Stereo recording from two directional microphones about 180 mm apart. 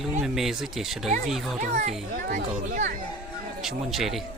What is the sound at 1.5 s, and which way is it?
A child's voice, 40° right (ahead or behind).